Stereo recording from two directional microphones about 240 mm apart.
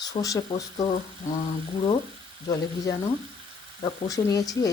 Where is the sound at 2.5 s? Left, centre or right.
Centre.